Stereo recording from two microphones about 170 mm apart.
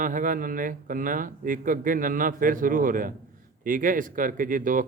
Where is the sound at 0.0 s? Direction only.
50° right (ahead or behind).